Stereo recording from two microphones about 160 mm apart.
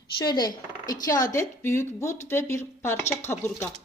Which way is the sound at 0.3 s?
25° left (ahead or behind).